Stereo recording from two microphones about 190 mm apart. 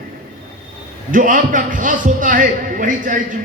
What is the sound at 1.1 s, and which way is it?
A man's voice, 45° right (ahead or behind).